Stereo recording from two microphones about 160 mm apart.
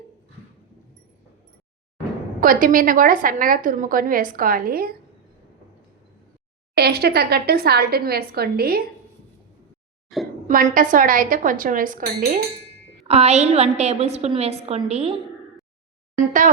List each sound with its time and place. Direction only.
2.4 s a woman's voice: 60° right (ahead or behind)
6.7 s speech: 80° right
10.1 s a sound: centre (ahead or behind)
10.4 s a woman's voice: 60° right (ahead or behind)
13.1 s a woman's voice: 40° right (ahead or behind)
16.1 s a woman's voice: 55° right (ahead or behind)